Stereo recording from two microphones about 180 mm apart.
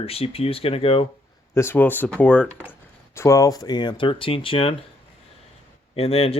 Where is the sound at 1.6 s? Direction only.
10° left (ahead or behind); by 4.7 s 30° left (ahead or behind).